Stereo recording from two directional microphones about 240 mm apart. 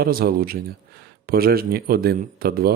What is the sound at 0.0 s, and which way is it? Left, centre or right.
A man's voice, right.